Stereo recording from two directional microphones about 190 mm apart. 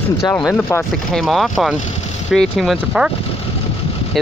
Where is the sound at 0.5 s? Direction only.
5° left (ahead or behind).